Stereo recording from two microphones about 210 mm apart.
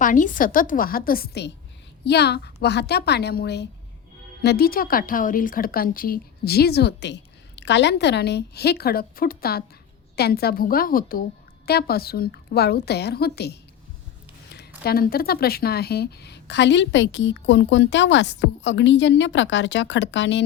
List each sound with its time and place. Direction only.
0.0 s a woman's voice: 40° left (ahead or behind)
14.8 s a woman's voice: 45° left (ahead or behind)